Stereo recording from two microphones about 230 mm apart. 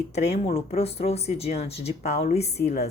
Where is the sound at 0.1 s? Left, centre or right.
Left.